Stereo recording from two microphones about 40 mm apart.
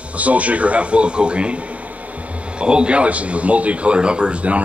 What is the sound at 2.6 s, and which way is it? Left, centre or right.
A man's voice, right.